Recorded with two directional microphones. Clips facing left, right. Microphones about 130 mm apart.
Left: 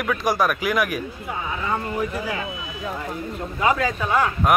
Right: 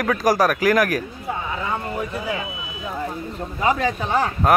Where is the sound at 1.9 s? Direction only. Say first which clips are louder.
Even; 20° right (ahead or behind).